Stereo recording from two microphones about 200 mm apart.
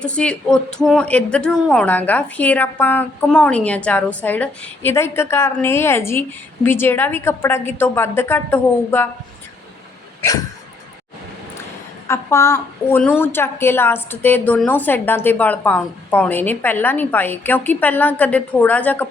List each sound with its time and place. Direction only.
0.0 s speech: 5° left (ahead or behind)
10.2 s dog: 15° left (ahead or behind)
12.0 s speech: 15° left (ahead or behind)